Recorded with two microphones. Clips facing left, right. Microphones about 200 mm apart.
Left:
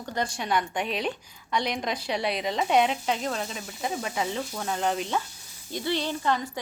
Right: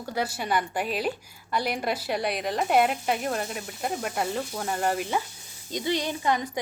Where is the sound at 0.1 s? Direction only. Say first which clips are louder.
Even; 5° right (ahead or behind).